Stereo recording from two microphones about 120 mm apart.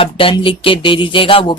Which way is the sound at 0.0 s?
50° left (ahead or behind).